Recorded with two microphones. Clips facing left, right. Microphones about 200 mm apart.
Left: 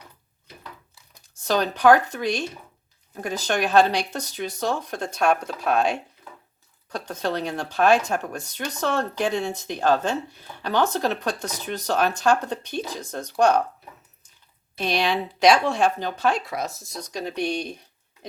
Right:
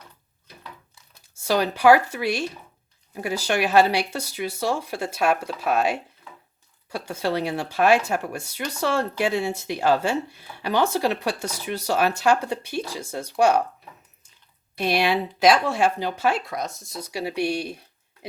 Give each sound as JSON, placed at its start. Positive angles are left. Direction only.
{"t": 1.4, "sound": "speech", "side_deg": -10}
{"t": 14.8, "sound": "speech", "side_deg": -10}